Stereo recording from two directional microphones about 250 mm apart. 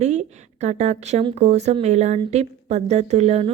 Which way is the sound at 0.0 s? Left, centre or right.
Right.